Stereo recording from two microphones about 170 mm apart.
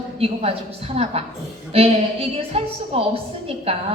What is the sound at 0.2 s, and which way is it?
A woman's voice, 35° right (ahead or behind).